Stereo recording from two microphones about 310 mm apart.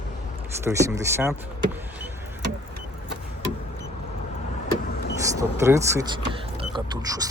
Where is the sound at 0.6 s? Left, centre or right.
Centre.